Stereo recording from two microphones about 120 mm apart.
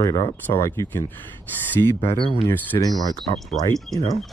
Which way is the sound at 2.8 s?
30° left (ahead or behind).